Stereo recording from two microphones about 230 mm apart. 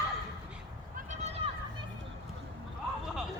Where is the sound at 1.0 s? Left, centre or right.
Right.